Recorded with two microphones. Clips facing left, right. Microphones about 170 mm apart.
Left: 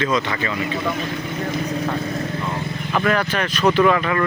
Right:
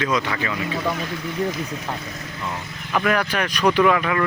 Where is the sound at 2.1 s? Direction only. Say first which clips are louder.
Left 10 dB; 50° left (ahead or behind).